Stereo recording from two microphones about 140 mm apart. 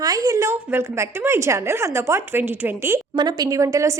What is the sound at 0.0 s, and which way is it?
A woman's voice, 25° right (ahead or behind).